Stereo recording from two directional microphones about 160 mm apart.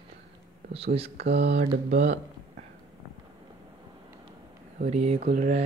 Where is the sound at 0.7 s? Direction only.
40° right (ahead or behind).